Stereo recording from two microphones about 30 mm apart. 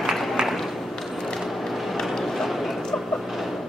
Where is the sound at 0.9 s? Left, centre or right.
Centre.